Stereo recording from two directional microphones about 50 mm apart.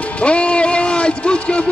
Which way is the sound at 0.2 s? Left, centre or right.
Left.